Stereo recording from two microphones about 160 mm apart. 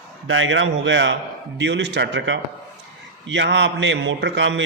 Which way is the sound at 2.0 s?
90° right.